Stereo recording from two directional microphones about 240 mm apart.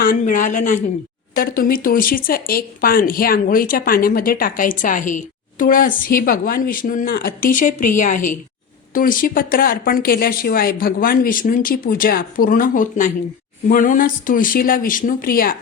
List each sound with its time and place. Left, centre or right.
0.0 s speech: left